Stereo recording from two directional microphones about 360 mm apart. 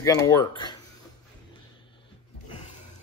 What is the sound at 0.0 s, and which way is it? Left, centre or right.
Speech, centre.